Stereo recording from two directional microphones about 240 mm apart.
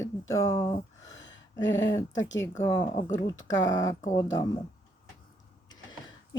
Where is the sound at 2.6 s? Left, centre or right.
Centre.